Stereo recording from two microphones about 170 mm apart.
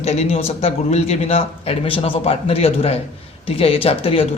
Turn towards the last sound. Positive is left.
turn(degrees=35)  # may be behind; listen again after turning